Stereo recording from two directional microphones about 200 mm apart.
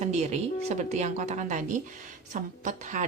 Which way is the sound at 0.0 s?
35° right (ahead or behind).